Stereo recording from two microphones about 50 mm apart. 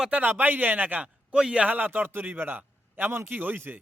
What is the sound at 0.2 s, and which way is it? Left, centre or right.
Speech, right.